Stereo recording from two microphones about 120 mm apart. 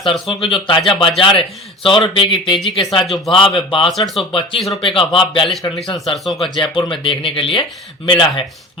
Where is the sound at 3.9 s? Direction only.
Centre (ahead or behind).